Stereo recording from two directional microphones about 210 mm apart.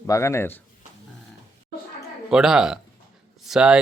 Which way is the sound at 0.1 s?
15° left (ahead or behind).